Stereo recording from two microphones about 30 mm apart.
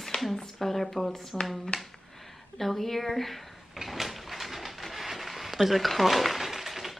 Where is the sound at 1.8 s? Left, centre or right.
Centre.